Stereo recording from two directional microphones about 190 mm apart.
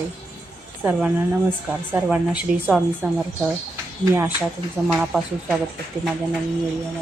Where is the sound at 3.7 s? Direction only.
10° right (ahead or behind).